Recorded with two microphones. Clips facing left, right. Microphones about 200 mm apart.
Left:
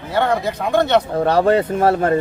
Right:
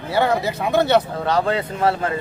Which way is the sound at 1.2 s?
45° left (ahead or behind).